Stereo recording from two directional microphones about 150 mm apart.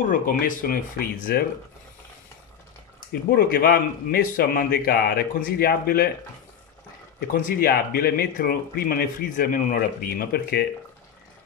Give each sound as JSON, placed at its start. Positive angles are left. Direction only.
{"t": 0.1, "sound": "speech", "side_deg": 65}
{"t": 3.1, "sound": "speech", "side_deg": 90}
{"t": 7.2, "sound": "speech", "side_deg": 85}